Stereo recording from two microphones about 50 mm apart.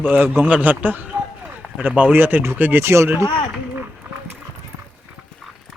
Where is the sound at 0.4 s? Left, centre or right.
Right.